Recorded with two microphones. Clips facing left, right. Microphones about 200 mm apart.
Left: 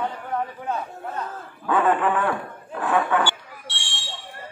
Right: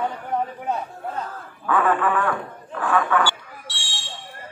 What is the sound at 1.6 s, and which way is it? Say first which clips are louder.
Speech: even; 25° left (ahead or behind).